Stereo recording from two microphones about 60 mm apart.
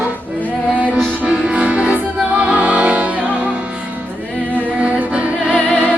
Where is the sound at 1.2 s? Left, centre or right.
Centre.